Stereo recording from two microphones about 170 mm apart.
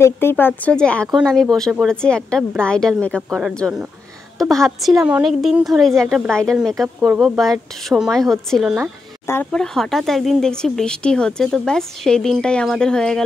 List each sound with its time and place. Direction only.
0.0 s a woman's voice: 15° left (ahead or behind)